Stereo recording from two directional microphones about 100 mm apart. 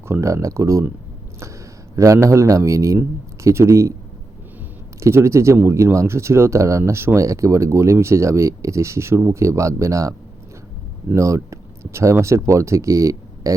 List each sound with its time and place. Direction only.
0.1 s a man's voice: 30° right (ahead or behind)
2.0 s a man's voice: 30° right (ahead or behind)
4.9 s speech: 30° right (ahead or behind)